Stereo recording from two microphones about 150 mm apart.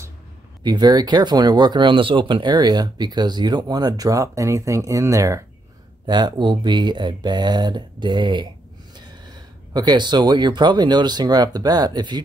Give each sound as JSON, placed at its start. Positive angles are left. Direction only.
{"t": 0.7, "sound": "speech", "side_deg": -25}
{"t": 9.8, "sound": "speech", "side_deg": -30}